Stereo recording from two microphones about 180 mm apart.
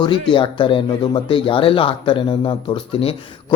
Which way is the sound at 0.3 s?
30° left (ahead or behind).